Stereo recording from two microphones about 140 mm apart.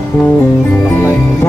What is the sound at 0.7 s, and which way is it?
Music, 15° left (ahead or behind).